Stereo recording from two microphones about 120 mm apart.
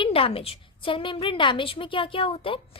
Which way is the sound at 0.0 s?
50° left (ahead or behind).